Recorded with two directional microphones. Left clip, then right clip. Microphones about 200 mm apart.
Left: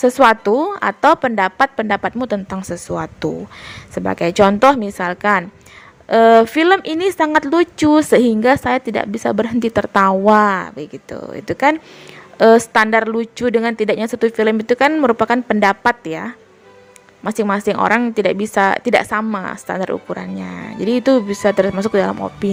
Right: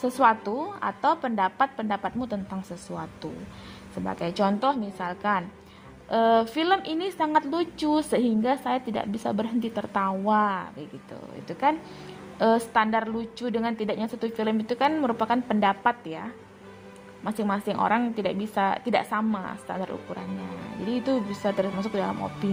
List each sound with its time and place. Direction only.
0.0 s a woman's voice: 35° left (ahead or behind)